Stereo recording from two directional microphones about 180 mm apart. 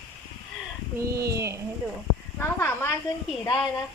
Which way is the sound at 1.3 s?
15° right (ahead or behind).